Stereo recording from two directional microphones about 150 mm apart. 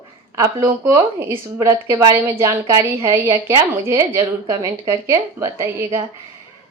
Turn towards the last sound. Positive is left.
turn(degrees=-20)  # may be behind; listen again after turning